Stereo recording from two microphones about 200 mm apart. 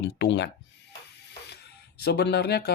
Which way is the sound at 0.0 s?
60° left (ahead or behind).